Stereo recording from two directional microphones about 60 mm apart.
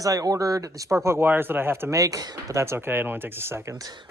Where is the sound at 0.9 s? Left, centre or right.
Right.